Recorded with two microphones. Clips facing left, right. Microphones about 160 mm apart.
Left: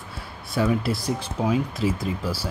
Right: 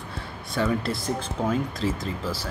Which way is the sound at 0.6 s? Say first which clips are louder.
Left 2 dB; 5° left (ahead or behind).